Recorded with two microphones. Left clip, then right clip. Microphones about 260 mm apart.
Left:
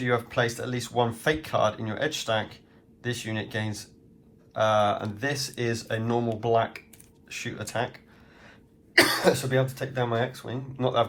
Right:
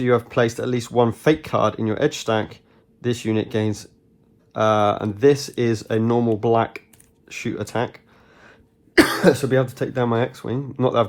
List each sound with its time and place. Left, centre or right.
0.1 s speech: right